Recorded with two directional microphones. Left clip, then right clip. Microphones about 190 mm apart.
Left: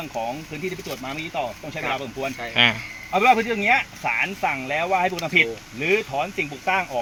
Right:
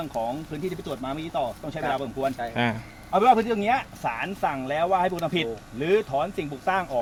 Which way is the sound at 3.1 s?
Centre (ahead or behind).